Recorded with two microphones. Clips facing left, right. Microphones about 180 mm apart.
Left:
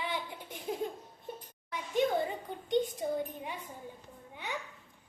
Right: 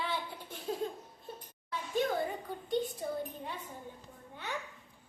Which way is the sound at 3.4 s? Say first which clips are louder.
Left 1 dB; 10° left (ahead or behind).